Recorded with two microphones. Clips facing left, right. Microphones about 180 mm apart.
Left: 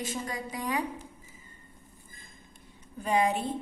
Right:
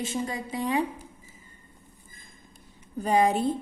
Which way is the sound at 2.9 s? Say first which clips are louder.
Right 4 dB; 35° right (ahead or behind).